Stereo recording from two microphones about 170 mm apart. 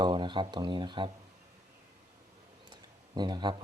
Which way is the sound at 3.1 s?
25° right (ahead or behind).